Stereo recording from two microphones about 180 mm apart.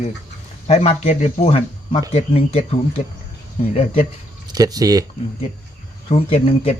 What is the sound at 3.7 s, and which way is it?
Speech, 35° left (ahead or behind).